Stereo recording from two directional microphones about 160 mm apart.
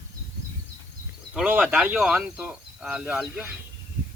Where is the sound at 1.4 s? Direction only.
5° right (ahead or behind).